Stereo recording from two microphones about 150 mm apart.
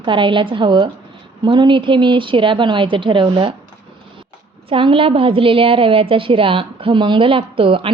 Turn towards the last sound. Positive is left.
turn(degrees=-35)  # may be behind; listen again after turning